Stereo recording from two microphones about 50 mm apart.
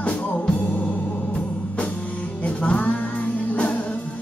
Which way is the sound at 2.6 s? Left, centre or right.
Left.